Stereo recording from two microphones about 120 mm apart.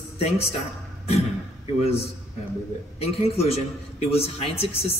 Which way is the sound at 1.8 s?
55° left (ahead or behind).